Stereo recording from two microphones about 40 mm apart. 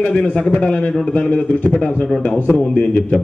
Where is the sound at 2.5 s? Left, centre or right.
Centre.